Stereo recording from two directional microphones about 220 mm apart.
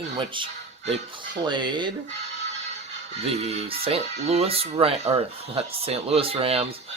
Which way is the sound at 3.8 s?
25° right (ahead or behind).